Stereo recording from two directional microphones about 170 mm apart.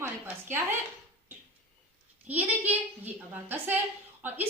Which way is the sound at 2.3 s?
10° right (ahead or behind).